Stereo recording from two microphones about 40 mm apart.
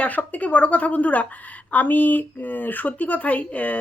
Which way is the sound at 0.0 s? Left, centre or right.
Left.